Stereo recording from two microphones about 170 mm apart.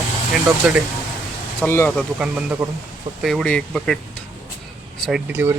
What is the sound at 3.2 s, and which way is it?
Speech, centre (ahead or behind).